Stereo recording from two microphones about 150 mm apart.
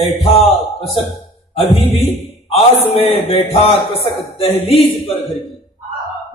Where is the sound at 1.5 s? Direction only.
40° left (ahead or behind).